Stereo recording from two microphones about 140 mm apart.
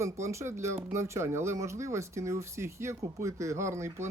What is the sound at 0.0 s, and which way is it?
Speech, 20° right (ahead or behind).